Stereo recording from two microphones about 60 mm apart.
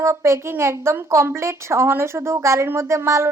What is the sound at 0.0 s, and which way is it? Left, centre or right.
Speech, right.